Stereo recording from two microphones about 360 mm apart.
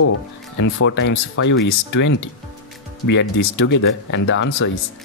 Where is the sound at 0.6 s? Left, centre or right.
Left.